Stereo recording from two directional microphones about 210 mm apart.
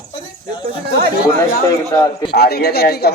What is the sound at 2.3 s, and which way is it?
Speech, 50° left (ahead or behind).